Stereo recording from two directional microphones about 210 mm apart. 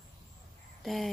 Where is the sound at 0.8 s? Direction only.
Centre (ahead or behind).